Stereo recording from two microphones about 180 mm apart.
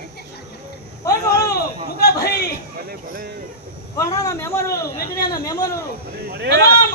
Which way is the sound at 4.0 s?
20° left (ahead or behind).